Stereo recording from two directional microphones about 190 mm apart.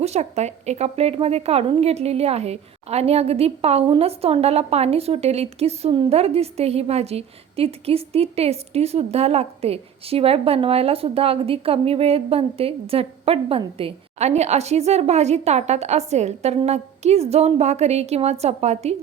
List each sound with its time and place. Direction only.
0.0 s speech: 35° right (ahead or behind)